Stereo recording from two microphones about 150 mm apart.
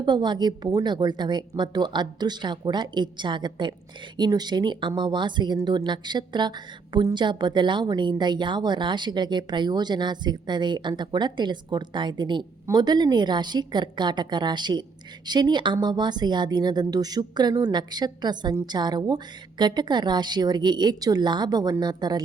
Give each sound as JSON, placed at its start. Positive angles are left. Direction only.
{"t": 0.0, "sound": "speech", "side_deg": -30}